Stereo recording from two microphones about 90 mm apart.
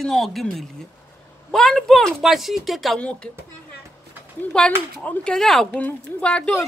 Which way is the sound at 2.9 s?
10° left (ahead or behind).